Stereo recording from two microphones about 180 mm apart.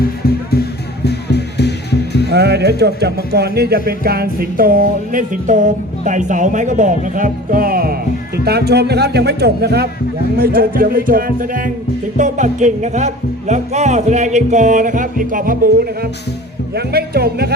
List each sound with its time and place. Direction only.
0.0 s music: 60° left (ahead or behind)
2.3 s speech: 65° right (ahead or behind); by 15.7 s 50° right (ahead or behind)
16.7 s speech: 60° right (ahead or behind)